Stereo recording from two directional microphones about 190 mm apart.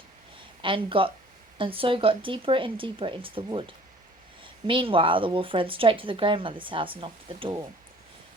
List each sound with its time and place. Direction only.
0.6 s speech: 25° right (ahead or behind)
4.6 s speech: 25° right (ahead or behind)